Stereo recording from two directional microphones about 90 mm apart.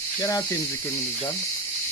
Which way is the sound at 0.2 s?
40° left (ahead or behind).